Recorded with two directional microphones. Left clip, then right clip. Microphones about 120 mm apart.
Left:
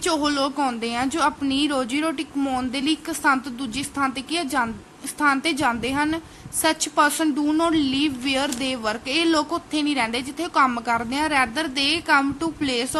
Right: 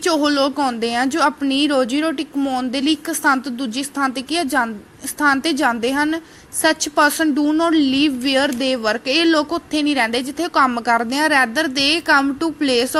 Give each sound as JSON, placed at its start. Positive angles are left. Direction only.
{"t": 0.0, "sound": "a woman's voice", "side_deg": -25}
{"t": 2.4, "sound": "speech", "side_deg": -15}
{"t": 2.7, "sound": "a woman's voice", "side_deg": -35}
{"t": 9.8, "sound": "a woman's voice", "side_deg": -35}